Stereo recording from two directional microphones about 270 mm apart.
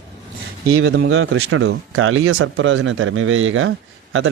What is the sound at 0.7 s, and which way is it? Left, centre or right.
Speech, right.